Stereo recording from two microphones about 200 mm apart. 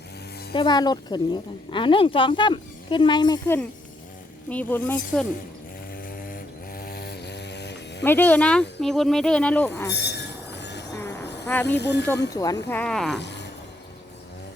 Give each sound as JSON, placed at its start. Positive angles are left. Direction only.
{"t": 0.5, "sound": "a woman's voice", "side_deg": 20}
{"t": 6.0, "sound": "a sound", "side_deg": 45}
{"t": 8.0, "sound": "speech", "side_deg": 10}
{"t": 9.9, "sound": "train", "side_deg": 55}
{"t": 10.9, "sound": "a sound", "side_deg": 15}
{"t": 11.6, "sound": "speech", "side_deg": 60}
{"t": 12.3, "sound": "speech", "side_deg": 20}
{"t": 12.6, "sound": "speech", "side_deg": 10}
{"t": 13.1, "sound": "a sound", "side_deg": 60}